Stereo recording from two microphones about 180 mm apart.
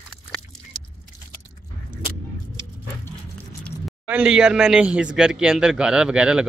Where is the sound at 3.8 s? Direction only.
5° right (ahead or behind).